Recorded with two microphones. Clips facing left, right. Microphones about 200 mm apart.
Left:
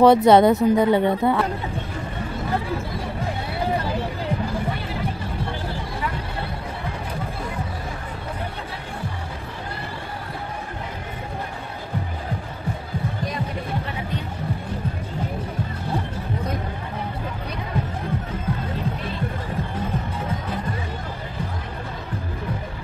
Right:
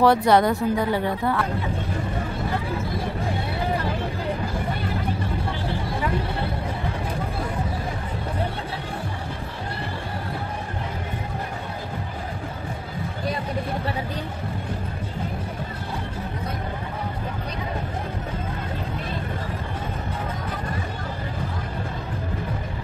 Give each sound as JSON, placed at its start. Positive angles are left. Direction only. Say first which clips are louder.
{"t": 0.0, "sound": "speech", "louder": "left 4 dB", "side_deg": 20}